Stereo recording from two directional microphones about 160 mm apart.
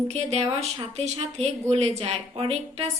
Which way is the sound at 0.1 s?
40° right (ahead or behind).